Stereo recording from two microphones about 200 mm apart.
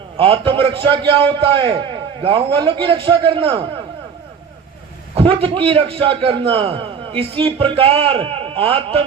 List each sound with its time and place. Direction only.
0.2 s a man's voice: 25° right (ahead or behind)
5.1 s a man's voice: 30° right (ahead or behind)